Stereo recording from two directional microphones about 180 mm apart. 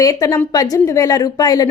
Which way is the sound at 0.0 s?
20° left (ahead or behind).